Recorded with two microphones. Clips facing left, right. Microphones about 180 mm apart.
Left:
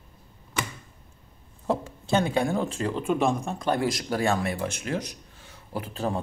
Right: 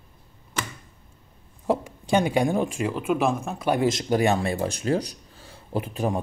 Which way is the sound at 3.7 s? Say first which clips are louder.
Right 4 dB; 20° right (ahead or behind).